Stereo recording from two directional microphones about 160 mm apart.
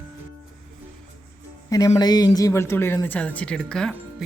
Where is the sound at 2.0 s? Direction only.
25° left (ahead or behind).